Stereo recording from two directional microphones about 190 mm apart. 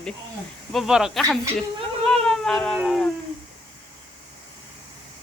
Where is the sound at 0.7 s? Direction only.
Centre (ahead or behind).